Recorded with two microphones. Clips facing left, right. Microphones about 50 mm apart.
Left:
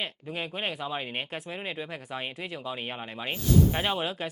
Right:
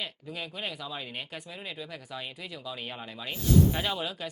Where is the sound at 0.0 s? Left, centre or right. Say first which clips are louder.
Left 3 dB; left.